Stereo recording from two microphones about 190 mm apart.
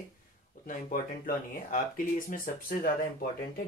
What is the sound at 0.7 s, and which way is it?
Speech, 45° left (ahead or behind).